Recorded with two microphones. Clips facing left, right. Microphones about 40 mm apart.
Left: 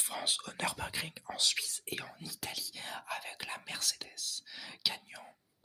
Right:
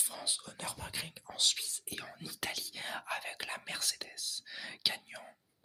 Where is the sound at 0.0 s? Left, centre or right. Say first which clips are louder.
Left 4 dB; left.